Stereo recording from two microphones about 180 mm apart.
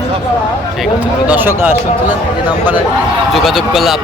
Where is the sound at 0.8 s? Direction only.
10° right (ahead or behind).